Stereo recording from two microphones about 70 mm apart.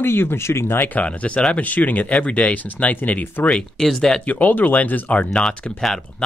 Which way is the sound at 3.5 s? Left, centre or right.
Centre.